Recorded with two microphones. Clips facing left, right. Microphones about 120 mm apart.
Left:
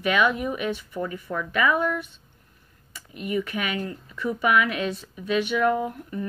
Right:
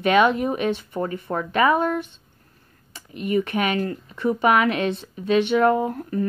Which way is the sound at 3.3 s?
25° right (ahead or behind).